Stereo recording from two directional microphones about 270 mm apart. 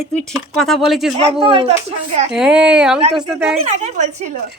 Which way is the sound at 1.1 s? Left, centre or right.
Right.